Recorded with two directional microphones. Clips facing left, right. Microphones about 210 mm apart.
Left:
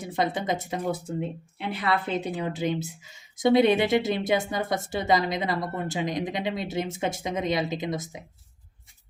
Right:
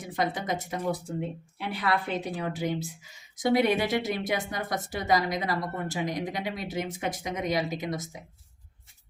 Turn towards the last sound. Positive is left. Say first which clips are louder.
# left 2 dB
turn(degrees=20)  # may be behind; listen again after turning